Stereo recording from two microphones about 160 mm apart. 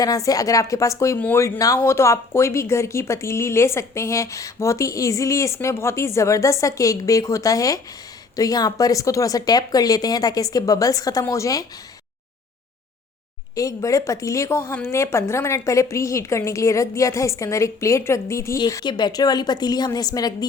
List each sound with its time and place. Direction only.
0.0 s a woman's voice: 20° left (ahead or behind)
13.6 s a woman's voice: 20° left (ahead or behind)